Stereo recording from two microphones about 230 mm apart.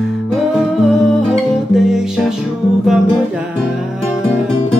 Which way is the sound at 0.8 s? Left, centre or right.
Centre.